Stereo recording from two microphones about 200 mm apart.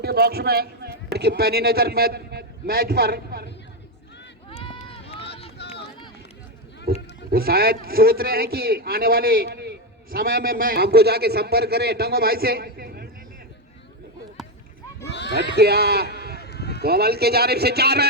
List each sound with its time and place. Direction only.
0.0 s speech: 50° right (ahead or behind)
4.4 s run: 25° left (ahead or behind)
6.9 s a man's voice: 50° right (ahead or behind)
15.0 s run: 60° left (ahead or behind)
15.5 s a man's voice: 55° right (ahead or behind)
16.4 s run: 55° left (ahead or behind)
16.8 s a man's voice: 50° right (ahead or behind)